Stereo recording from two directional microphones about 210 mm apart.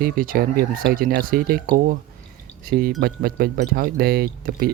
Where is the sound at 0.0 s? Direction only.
45° right (ahead or behind).